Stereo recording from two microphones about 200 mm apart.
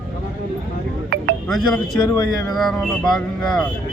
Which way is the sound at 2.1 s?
20° left (ahead or behind).